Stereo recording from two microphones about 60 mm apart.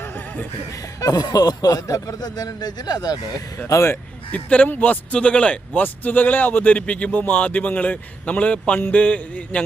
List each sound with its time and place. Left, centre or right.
1.0 s speech: left
4.3 s speech: left